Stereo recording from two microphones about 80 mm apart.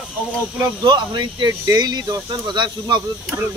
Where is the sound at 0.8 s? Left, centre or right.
Right.